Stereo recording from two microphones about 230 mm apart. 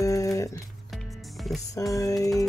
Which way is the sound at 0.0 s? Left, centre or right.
Centre.